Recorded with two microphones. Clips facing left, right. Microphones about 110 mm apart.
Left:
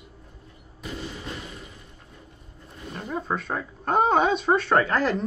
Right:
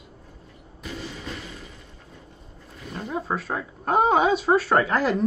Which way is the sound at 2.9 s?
Centre (ahead or behind).